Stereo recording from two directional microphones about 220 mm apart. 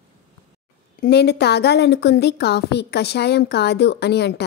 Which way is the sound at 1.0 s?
50° left (ahead or behind).